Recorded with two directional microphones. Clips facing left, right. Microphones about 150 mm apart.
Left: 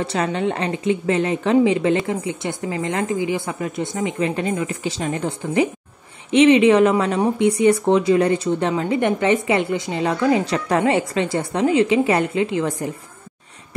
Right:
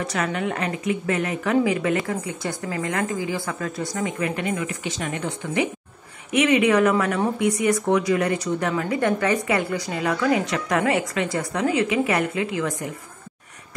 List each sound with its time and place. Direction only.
0.0 s speech: 30° left (ahead or behind)